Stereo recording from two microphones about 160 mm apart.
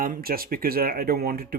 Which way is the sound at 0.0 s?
65° right (ahead or behind).